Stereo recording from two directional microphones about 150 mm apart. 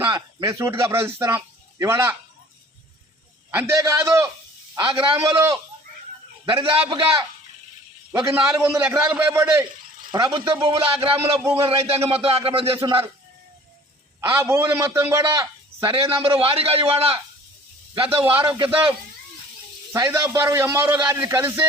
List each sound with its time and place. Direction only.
0.0 s a sound: 30° right (ahead or behind)
0.6 s a man's voice: 15° right (ahead or behind)
3.5 s a man's voice: 20° right (ahead or behind)
4.8 s a man's voice: 35° right (ahead or behind)
6.4 s a man's voice: 35° right (ahead or behind)
8.2 s a man's voice: 20° right (ahead or behind)
10.1 s a man's voice: 30° right (ahead or behind)
14.2 s a man's voice: 15° right (ahead or behind)
15.8 s a man's voice: 35° right (ahead or behind)
19.9 s a man's voice: 20° right (ahead or behind)
20.9 s a man's voice: 30° right (ahead or behind)
21.2 s a man's voice: 15° right (ahead or behind)